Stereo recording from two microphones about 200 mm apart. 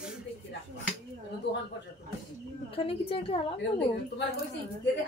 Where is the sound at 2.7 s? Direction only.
25° left (ahead or behind).